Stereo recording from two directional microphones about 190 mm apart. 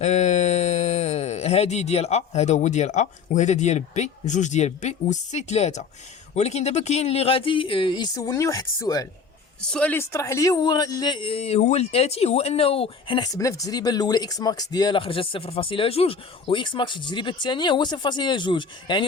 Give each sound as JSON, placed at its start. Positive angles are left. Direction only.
{"t": 0.0, "sound": "speech", "side_deg": 40}
{"t": 9.6, "sound": "speech", "side_deg": 5}